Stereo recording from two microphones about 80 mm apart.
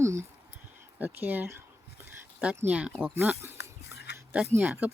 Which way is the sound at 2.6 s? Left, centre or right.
Centre.